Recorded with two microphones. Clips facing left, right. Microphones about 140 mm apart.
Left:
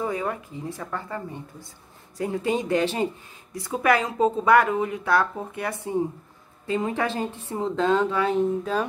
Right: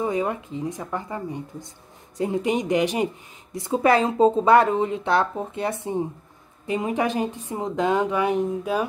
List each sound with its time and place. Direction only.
0.0 s speech: 20° right (ahead or behind)